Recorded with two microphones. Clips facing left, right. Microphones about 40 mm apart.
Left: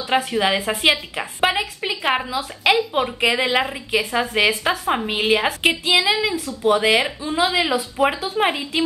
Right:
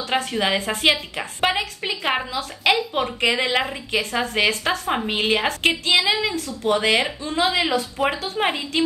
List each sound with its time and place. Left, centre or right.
0.1 s a woman's voice: centre